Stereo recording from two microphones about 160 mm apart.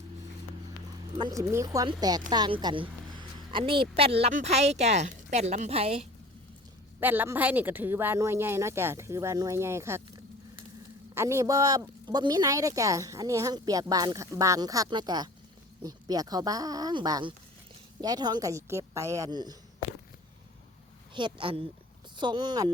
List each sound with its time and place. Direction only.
1.1 s a woman's voice: 25° right (ahead or behind); by 6.1 s 40° right (ahead or behind)
7.0 s speech: 10° right (ahead or behind)
11.1 s speech: 15° right (ahead or behind)
21.1 s a woman's voice: 30° right (ahead or behind)